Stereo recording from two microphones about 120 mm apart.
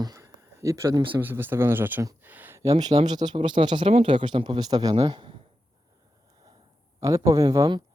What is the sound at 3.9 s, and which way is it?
Speech, 55° right (ahead or behind).